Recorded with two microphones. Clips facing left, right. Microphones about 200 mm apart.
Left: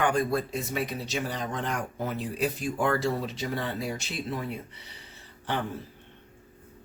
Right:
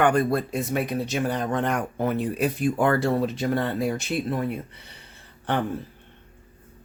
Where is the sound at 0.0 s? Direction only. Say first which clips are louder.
Right 5 dB; 60° right (ahead or behind).